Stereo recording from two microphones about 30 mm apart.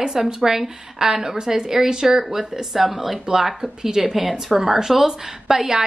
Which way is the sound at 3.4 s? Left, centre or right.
Centre.